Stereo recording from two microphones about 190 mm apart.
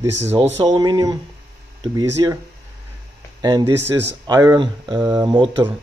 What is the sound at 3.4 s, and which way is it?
Speech, 20° right (ahead or behind).